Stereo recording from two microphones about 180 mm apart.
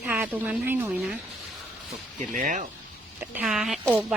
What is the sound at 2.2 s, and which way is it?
Speech, 45° right (ahead or behind).